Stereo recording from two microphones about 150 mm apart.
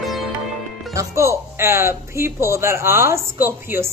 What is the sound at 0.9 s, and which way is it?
A woman's voice, 20° right (ahead or behind).